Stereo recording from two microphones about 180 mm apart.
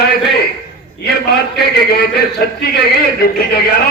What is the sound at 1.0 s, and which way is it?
A man's voice, 60° left (ahead or behind).